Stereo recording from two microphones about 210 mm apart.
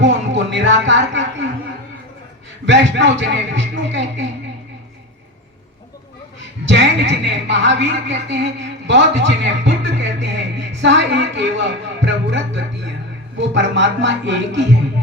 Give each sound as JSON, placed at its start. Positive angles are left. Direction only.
{"t": 0.0, "sound": "a sound", "side_deg": -60}
{"t": 2.6, "sound": "a woman's voice", "side_deg": -55}
{"t": 6.7, "sound": "a woman's voice", "side_deg": -55}